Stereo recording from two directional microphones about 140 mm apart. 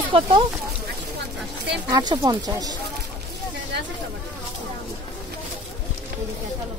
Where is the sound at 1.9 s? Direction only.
30° right (ahead or behind).